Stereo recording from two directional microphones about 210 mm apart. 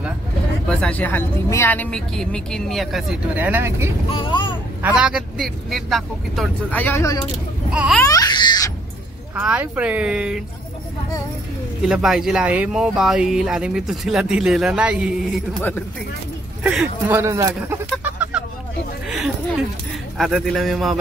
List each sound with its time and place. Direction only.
0.7 s speech: 5° left (ahead or behind); by 3.9 s 10° right (ahead or behind)
4.1 s speech: 25° left (ahead or behind)
4.8 s speech: 5° right (ahead or behind); by 7.2 s 10° left (ahead or behind)
7.7 s speech: 5° right (ahead or behind)
8.0 s speech: 15° left (ahead or behind)
9.3 s speech: 5° right (ahead or behind)
11.9 s speech: centre (ahead or behind)
16.6 s speech: 5° right (ahead or behind)
17.8 s a sound: 5° right (ahead or behind)
20.2 s speech: centre (ahead or behind)